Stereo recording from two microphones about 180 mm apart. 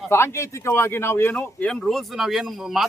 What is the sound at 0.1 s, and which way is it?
Speech, 15° left (ahead or behind).